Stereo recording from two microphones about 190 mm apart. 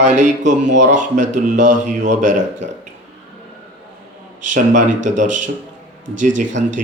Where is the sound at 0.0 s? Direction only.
40° right (ahead or behind).